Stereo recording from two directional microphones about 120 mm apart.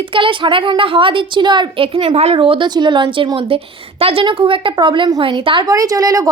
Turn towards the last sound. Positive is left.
turn(degrees=-30)  # may be behind; listen again after turning